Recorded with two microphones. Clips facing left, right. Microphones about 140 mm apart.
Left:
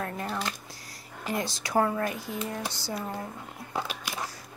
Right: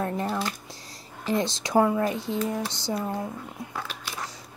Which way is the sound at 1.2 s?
25° right (ahead or behind).